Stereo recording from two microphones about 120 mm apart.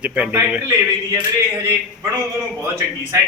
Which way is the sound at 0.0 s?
10° right (ahead or behind).